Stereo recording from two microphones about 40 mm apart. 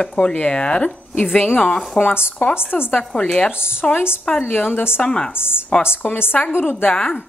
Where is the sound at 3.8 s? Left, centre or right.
Centre.